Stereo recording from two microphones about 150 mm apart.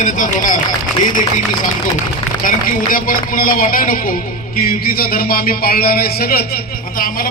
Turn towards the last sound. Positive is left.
turn(degrees=70)  # may be behind; listen again after turning